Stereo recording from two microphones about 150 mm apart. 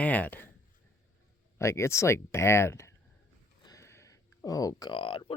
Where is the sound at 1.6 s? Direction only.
20° left (ahead or behind).